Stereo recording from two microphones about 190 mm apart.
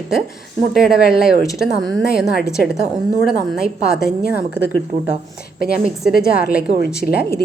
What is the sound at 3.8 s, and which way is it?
Speech, 5° right (ahead or behind).